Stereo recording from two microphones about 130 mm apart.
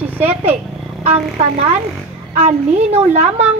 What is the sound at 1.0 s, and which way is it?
A woman's voice, 50° right (ahead or behind).